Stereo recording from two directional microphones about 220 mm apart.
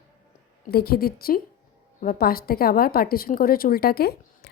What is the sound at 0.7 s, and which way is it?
A woman's voice, 45° left (ahead or behind).